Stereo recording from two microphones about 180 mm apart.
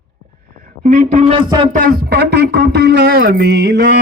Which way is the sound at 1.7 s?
50° right (ahead or behind).